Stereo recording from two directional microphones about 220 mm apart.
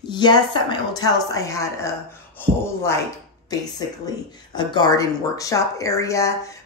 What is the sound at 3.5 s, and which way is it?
Speech, 15° left (ahead or behind).